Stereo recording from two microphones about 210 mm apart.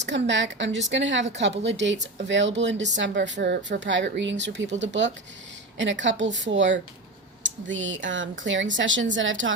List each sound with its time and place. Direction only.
0.0 s a woman's voice: 55° right (ahead or behind)